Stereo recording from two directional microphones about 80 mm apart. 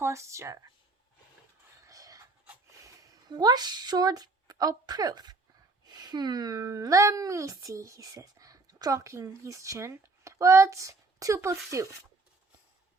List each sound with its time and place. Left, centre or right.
0.0 s speech: right
1.9 s pant: right
3.2 s a woman's voice: right